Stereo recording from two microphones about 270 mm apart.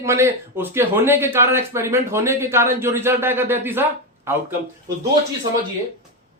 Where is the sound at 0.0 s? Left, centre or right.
Centre.